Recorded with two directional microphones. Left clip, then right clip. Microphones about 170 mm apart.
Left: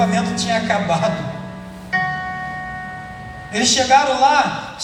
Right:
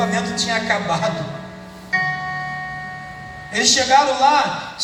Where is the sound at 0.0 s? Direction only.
30° right (ahead or behind).